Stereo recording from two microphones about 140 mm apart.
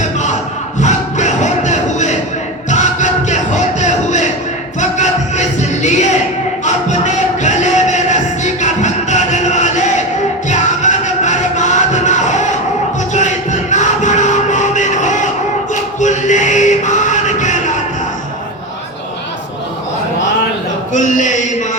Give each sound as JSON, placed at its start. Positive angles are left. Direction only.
{"t": 0.0, "sound": "a sound", "side_deg": 60}
{"t": 0.8, "sound": "music", "side_deg": 55}
{"t": 13.1, "sound": "crowd", "side_deg": 60}
{"t": 15.7, "sound": "chant", "side_deg": 60}
{"t": 20.9, "sound": "mantra", "side_deg": 60}